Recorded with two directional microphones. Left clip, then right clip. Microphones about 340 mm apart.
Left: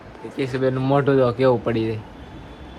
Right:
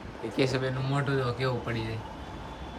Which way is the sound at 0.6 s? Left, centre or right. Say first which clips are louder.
Left 12 dB; centre.